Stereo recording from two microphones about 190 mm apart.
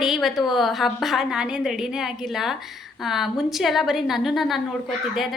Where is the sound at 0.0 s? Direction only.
Centre (ahead or behind).